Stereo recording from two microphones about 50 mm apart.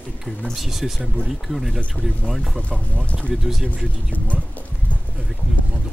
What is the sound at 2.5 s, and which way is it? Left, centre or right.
Speech, left.